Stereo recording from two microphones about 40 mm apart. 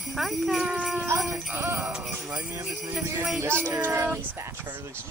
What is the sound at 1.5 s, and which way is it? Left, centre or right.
Jingle bell, right.